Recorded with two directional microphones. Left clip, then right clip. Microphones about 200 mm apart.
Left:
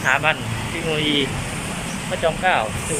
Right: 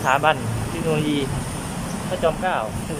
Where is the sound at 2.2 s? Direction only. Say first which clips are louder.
Left 3 dB; 10° right (ahead or behind).